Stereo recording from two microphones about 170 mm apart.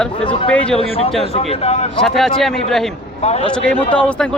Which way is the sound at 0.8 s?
35° left (ahead or behind).